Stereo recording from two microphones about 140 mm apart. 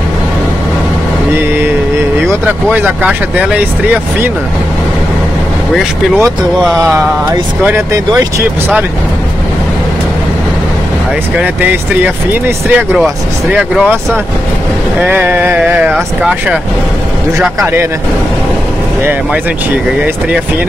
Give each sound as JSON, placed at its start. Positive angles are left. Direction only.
{"t": 2.7, "sound": "speech", "side_deg": -10}
{"t": 6.6, "sound": "a sound", "side_deg": -5}
{"t": 7.6, "sound": "speech", "side_deg": -20}
{"t": 11.3, "sound": "speech", "side_deg": -10}
{"t": 15.0, "sound": "speech", "side_deg": -15}